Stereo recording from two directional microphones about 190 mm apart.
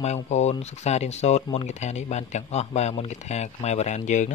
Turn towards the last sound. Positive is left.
turn(degrees=40)  # may be behind; listen again after turning